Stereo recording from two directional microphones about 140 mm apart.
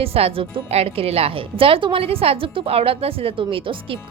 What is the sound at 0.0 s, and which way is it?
A woman's voice, 45° right (ahead or behind).